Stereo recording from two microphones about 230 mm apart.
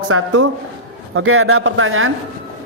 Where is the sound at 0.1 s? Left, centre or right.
Right.